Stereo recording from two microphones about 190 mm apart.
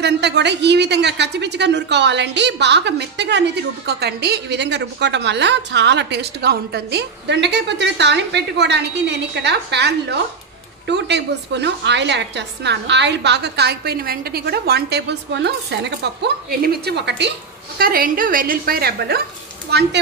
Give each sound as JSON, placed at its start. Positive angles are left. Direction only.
{"t": 0.0, "sound": "a woman's voice", "side_deg": -60}
{"t": 17.7, "sound": "a woman's voice", "side_deg": -50}